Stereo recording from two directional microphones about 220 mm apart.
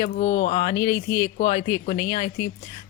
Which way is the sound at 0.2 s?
35° left (ahead or behind).